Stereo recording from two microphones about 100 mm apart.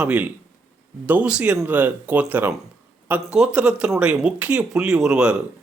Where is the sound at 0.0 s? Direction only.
15° right (ahead or behind).